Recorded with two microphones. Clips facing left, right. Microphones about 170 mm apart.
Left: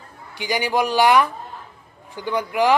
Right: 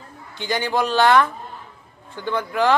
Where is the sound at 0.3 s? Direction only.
10° left (ahead or behind).